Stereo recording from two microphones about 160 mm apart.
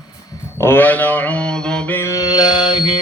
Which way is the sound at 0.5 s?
15° left (ahead or behind).